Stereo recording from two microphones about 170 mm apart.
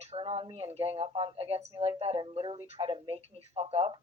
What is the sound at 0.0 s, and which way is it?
Speech, 35° right (ahead or behind).